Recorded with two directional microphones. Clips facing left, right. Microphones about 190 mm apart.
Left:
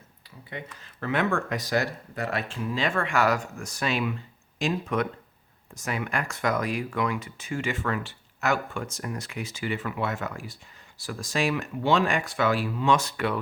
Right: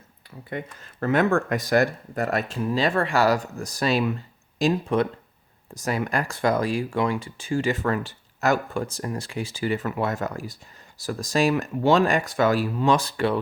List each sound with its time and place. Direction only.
0.5 s speech: 45° right (ahead or behind); by 13.4 s 30° right (ahead or behind)